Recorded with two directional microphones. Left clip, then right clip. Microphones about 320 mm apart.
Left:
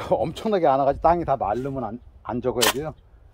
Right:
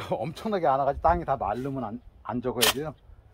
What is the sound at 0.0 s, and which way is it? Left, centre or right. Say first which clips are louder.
Speech: left 8 dB; left.